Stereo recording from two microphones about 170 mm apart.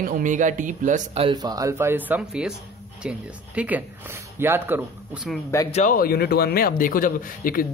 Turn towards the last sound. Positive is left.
turn(degrees=55)  # may be behind; listen again after turning